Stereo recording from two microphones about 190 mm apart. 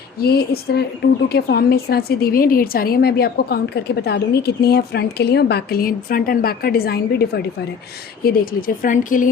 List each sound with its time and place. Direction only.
0.2 s a woman's voice: 55° left (ahead or behind)